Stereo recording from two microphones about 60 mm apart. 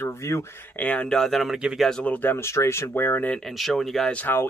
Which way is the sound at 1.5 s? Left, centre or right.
Centre.